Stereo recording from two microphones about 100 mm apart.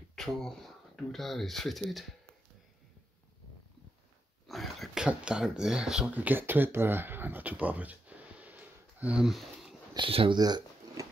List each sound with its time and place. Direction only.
0.1 s speech: 5° left (ahead or behind)
4.5 s speech: centre (ahead or behind); by 9.2 s 15° right (ahead or behind)
9.2 s speech: centre (ahead or behind)
9.9 s speech: 60° right (ahead or behind)
10.4 s a sound: 40° right (ahead or behind)